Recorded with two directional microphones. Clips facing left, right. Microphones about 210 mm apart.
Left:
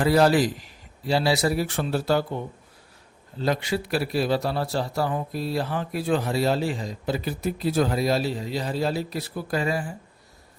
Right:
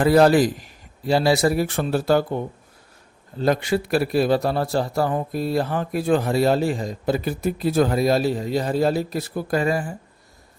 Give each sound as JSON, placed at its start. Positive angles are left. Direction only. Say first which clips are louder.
{"t": 0.0, "sound": "a man's voice", "louder": "right 4 dB", "side_deg": -50}